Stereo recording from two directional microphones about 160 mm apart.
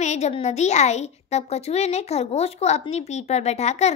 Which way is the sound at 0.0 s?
45° left (ahead or behind).